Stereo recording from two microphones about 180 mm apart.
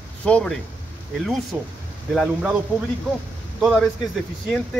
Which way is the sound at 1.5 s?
10° right (ahead or behind).